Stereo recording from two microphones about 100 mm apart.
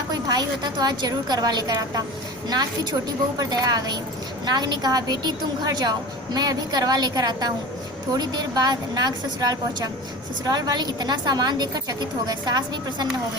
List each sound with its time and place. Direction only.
0.1 s a woman's voice: 40° right (ahead or behind)
3.3 s a woman's voice: 40° right (ahead or behind)